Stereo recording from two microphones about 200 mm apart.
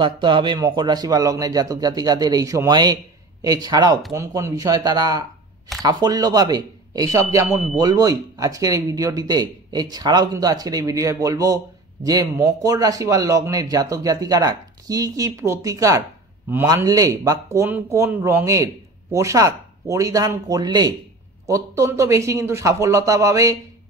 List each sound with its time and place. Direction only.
0.0 s speech: 25° right (ahead or behind)